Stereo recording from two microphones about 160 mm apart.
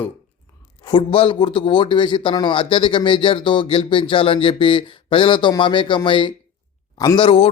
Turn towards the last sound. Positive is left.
turn(degrees=35)  # may be behind; listen again after turning